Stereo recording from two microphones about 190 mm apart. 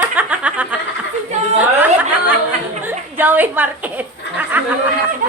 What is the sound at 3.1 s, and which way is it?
Speech, 10° right (ahead or behind).